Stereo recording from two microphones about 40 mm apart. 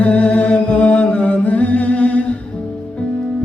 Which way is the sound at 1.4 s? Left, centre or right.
Left.